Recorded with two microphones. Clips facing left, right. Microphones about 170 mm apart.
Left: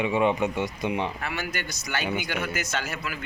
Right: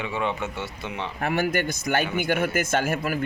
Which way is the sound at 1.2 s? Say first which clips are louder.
Right 8 dB; 50° right (ahead or behind).